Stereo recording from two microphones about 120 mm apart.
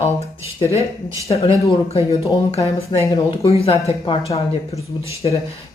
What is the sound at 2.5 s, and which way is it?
A woman's voice, 55° left (ahead or behind).